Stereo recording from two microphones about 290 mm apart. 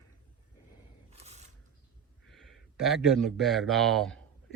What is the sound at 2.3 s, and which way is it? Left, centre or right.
A man's voice, centre.